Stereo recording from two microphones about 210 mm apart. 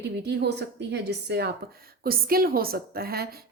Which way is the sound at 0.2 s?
55° right (ahead or behind).